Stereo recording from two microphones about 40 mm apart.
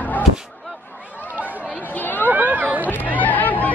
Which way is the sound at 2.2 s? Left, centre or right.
Right.